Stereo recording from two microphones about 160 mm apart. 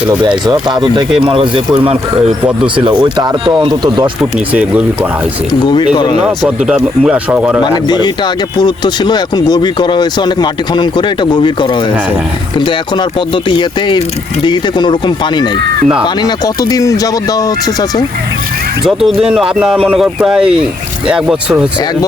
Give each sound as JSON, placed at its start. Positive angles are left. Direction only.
{"t": 0.3, "sound": "speech", "side_deg": -25}
{"t": 4.2, "sound": "speech", "side_deg": -5}
{"t": 5.9, "sound": "speech", "side_deg": 30}
{"t": 6.2, "sound": "speech", "side_deg": -5}
{"t": 7.6, "sound": "speech", "side_deg": 25}
{"t": 18.9, "sound": "speech", "side_deg": 0}